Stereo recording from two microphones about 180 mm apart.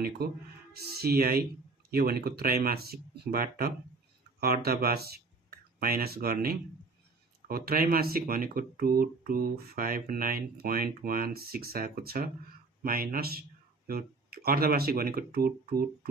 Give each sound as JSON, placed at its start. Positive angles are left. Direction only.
{"t": 0.7, "sound": "speech", "side_deg": -60}